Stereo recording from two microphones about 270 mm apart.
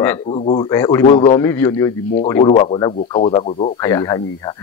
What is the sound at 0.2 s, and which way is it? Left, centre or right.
A man's voice, left.